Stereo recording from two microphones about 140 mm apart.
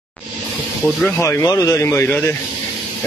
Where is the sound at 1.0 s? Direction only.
20° left (ahead or behind).